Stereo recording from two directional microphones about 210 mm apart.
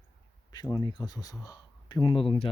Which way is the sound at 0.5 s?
20° left (ahead or behind).